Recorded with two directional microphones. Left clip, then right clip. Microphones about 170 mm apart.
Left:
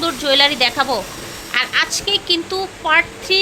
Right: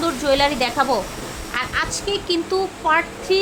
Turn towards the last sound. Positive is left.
turn(degrees=0)  # may be behind; listen again after turning